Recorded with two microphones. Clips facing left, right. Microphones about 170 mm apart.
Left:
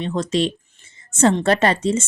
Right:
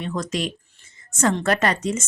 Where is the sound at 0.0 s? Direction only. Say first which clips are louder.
Left 5 dB; 25° left (ahead or behind).